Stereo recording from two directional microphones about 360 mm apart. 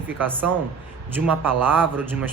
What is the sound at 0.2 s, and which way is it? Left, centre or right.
Speech, centre.